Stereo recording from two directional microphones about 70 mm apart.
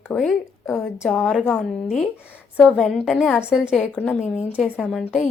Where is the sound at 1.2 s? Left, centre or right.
Centre.